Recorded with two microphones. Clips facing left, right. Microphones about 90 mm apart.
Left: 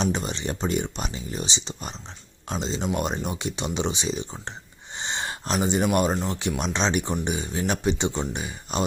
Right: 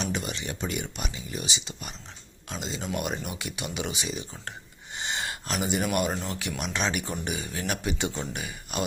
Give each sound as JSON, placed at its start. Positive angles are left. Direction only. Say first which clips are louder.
{"t": 0.0, "sound": "speech", "louder": "left 5 dB", "side_deg": 30}
{"t": 4.9, "sound": "gasp", "louder": "left 2 dB", "side_deg": 25}
{"t": 6.2, "sound": "speech", "louder": "left 6 dB", "side_deg": 25}